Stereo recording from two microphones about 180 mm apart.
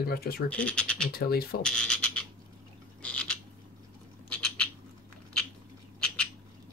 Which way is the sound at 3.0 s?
5° left (ahead or behind).